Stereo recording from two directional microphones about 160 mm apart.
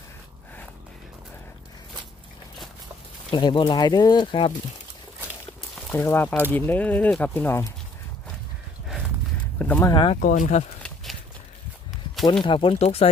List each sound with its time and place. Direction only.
3.3 s speech: 30° left (ahead or behind)
6.0 s speech: 10° left (ahead or behind)
9.6 s speech: 10° left (ahead or behind)
9.8 s speech: 30° left (ahead or behind)
10.2 s speech: 55° left (ahead or behind)
12.4 s speech: 35° left (ahead or behind)